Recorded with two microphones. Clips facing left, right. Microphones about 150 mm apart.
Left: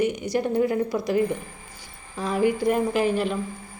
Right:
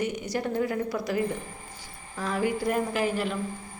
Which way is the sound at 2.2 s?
20° left (ahead or behind).